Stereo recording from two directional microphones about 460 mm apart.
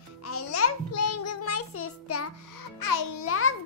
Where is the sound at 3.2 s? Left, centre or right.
Left.